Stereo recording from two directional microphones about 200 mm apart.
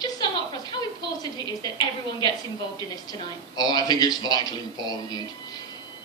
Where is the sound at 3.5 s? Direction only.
20° left (ahead or behind).